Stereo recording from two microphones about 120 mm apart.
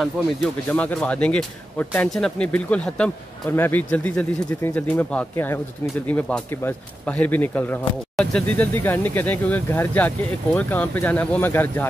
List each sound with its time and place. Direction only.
0.7 s speech: 10° left (ahead or behind)
8.5 s speech: 20° left (ahead or behind)